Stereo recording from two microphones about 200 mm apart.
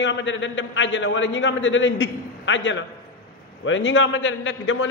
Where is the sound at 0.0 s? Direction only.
65° left (ahead or behind).